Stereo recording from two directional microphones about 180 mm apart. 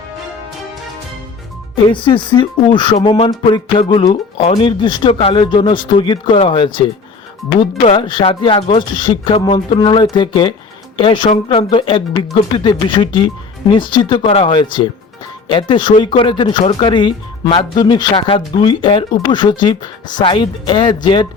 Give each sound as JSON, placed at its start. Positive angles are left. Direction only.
{"t": 1.7, "sound": "speech", "side_deg": 30}